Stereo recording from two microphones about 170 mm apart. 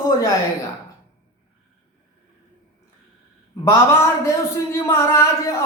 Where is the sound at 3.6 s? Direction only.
15° left (ahead or behind).